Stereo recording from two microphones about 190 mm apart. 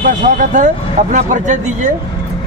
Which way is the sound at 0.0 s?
40° right (ahead or behind).